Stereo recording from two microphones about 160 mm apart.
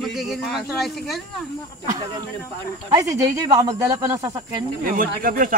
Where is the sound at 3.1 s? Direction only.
25° right (ahead or behind).